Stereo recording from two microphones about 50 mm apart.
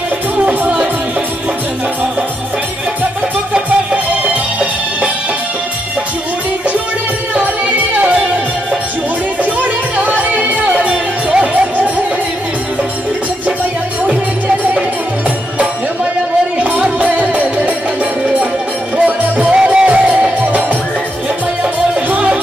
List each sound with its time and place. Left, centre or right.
0.4 s music: right
3.5 s music: right
9.4 s music: right
16.5 s music: right
18.9 s music: right
22.1 s music: right